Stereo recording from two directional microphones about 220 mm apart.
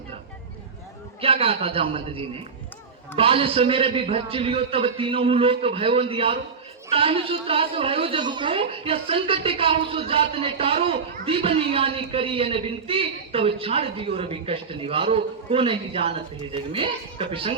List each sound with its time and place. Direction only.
1.2 s a woman's voice: 25° right (ahead or behind)